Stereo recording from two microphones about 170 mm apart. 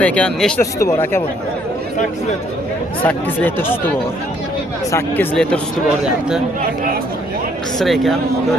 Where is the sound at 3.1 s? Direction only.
10° left (ahead or behind).